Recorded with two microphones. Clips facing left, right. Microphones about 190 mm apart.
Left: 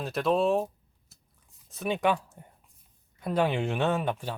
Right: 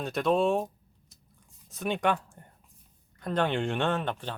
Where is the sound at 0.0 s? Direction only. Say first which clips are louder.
Even; centre (ahead or behind).